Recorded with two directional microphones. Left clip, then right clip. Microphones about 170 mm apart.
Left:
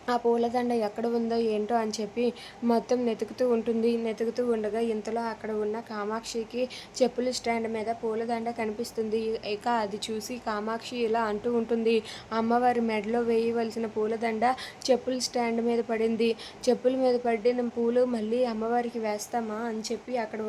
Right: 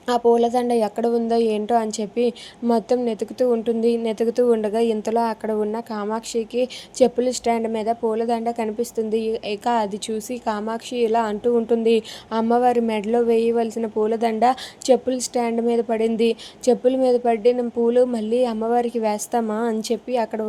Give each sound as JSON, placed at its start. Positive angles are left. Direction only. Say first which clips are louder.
{"t": 0.1, "sound": "a woman's voice", "louder": "right 8 dB", "side_deg": -30}